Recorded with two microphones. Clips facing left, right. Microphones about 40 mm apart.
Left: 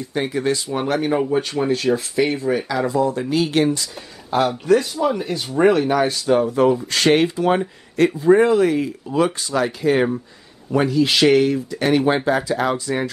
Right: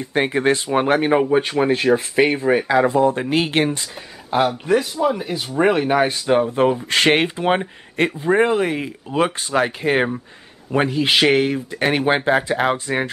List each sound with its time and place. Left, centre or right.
0.0 s speech: right
4.4 s speech: centre
5.7 s speech: right